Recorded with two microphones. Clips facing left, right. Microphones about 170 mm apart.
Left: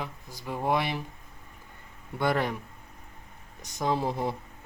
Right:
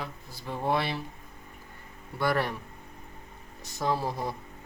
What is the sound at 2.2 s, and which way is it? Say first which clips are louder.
Speech: left 1 dB; 20° left (ahead or behind).